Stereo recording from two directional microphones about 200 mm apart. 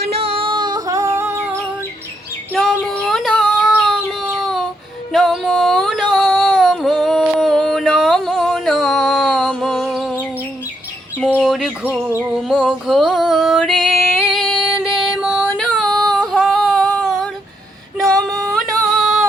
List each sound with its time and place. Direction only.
0.0 s female singing: 30° right (ahead or behind); by 1.6 s 15° right (ahead or behind)
2.5 s female singing: centre (ahead or behind)
3.7 s a sound: 5° left (ahead or behind)
5.1 s female singing: centre (ahead or behind)
11.2 s bird: 5° right (ahead or behind)
12.2 s music: centre (ahead or behind)
16.3 s a sound: centre (ahead or behind)
18.3 s singing: centre (ahead or behind)